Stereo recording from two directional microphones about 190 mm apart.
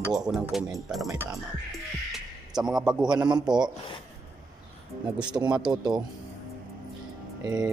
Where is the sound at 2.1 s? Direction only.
5° right (ahead or behind).